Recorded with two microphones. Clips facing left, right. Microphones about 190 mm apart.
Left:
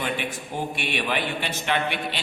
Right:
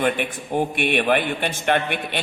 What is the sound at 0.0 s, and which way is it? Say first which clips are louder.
A man's voice: right 6 dB; 55° right (ahead or behind).